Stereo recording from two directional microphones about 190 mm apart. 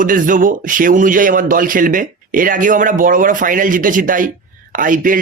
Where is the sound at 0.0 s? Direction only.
45° right (ahead or behind).